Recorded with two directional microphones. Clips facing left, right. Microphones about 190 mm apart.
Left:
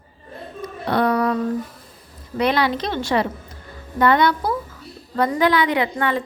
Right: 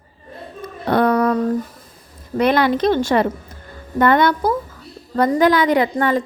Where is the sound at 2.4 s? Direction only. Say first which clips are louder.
Right 4 dB; 50° right (ahead or behind).